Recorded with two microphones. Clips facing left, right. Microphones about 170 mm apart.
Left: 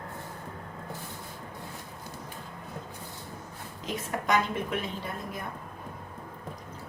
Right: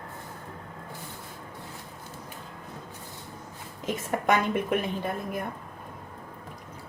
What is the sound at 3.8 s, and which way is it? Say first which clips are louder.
A woman's voice: right 4 dB; 55° right (ahead or behind).